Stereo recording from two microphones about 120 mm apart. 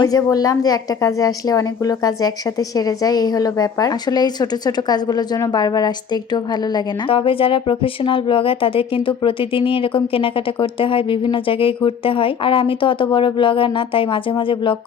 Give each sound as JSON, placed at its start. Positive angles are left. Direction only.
{"t": 0.0, "sound": "a woman's voice", "side_deg": 30}